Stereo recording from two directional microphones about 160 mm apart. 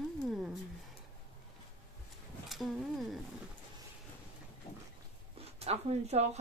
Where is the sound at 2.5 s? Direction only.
Centre (ahead or behind).